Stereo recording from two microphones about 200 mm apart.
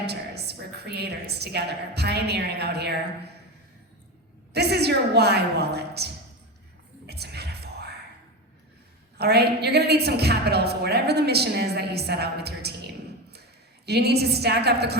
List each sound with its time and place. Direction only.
0.0 s a woman's voice: 55° right (ahead or behind)
4.5 s a woman's voice: 55° right (ahead or behind)
7.1 s a sound: 55° right (ahead or behind)
9.1 s a woman's voice: 55° right (ahead or behind)